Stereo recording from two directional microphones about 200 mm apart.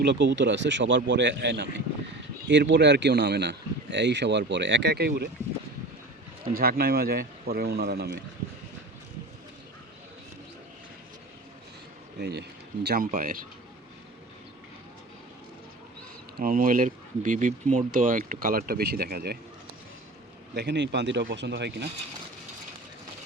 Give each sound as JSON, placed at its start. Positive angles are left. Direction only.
{"t": 0.0, "sound": "speech", "side_deg": -60}
{"t": 6.4, "sound": "speech", "side_deg": -45}
{"t": 12.2, "sound": "speech", "side_deg": -55}
{"t": 16.4, "sound": "speech", "side_deg": -45}
{"t": 20.6, "sound": "speech", "side_deg": -60}